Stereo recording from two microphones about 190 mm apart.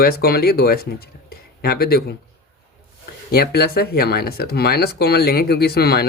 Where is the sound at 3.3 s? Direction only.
55° left (ahead or behind).